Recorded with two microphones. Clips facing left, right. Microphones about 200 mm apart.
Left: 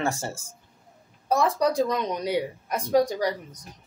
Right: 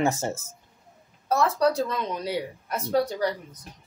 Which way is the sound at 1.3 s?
15° left (ahead or behind).